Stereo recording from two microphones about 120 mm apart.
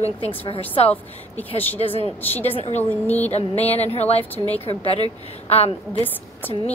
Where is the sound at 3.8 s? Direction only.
60° left (ahead or behind).